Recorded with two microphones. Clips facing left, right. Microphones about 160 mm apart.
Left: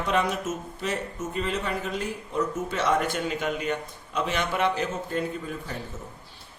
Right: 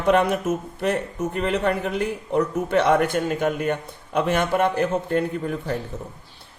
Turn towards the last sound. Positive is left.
turn(degrees=-60)  # may be behind; listen again after turning